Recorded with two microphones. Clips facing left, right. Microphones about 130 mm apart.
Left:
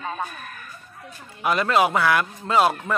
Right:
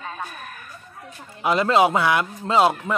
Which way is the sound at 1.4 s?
25° right (ahead or behind).